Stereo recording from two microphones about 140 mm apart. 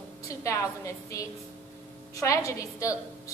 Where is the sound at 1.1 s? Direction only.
20° left (ahead or behind).